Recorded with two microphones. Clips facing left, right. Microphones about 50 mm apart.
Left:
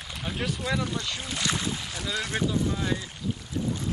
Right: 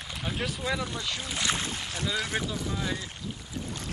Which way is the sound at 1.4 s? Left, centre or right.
Right.